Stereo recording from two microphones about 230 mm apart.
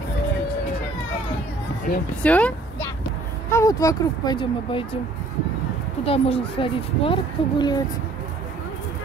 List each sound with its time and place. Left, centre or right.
2.2 s a sound: centre
3.4 s speech: centre
6.0 s speech: left